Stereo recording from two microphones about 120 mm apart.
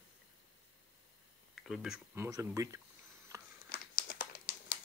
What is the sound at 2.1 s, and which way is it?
Speech, 25° right (ahead or behind).